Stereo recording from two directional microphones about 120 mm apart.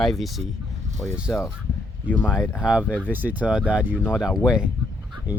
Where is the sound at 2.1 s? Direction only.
10° right (ahead or behind).